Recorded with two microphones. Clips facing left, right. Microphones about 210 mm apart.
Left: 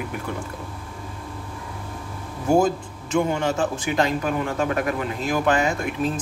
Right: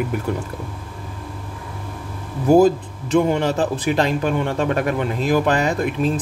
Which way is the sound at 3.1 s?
35° right (ahead or behind).